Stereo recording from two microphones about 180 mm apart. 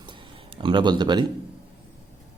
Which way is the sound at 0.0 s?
25° right (ahead or behind).